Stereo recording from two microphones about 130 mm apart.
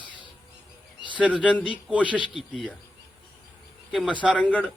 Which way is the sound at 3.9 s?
5° right (ahead or behind).